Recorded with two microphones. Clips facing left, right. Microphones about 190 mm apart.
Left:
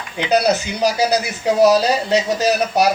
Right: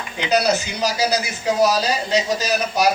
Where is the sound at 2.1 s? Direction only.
65° left (ahead or behind).